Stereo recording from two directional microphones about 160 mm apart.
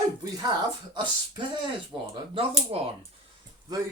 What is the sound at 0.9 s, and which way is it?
Speech, 30° right (ahead or behind).